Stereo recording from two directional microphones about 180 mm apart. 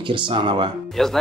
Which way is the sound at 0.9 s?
Centre (ahead or behind).